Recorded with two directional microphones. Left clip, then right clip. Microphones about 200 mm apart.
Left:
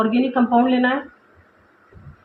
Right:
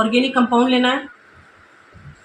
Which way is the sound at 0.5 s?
30° right (ahead or behind).